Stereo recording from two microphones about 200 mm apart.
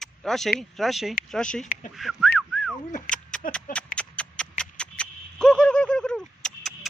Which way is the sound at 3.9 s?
5° left (ahead or behind).